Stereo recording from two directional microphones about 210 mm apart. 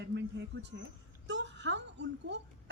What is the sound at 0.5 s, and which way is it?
A woman's voice, 65° right (ahead or behind).